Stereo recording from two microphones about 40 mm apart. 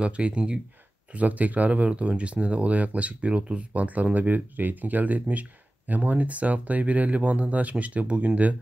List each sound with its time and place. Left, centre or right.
0.0 s speech: right
1.1 s speech: right